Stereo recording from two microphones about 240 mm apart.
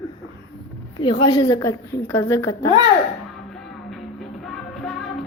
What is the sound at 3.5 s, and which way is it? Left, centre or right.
Music, centre.